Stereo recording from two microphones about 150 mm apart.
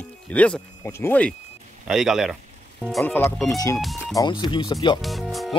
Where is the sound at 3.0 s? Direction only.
15° left (ahead or behind).